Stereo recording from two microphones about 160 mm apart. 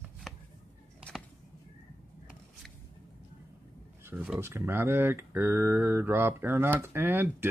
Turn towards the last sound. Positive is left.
turn(degrees=-15)  # may be behind; listen again after turning